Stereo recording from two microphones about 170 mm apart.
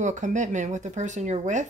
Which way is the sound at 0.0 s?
45° right (ahead or behind).